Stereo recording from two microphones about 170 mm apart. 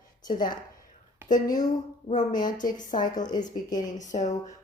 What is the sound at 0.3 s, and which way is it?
Speech, 50° left (ahead or behind).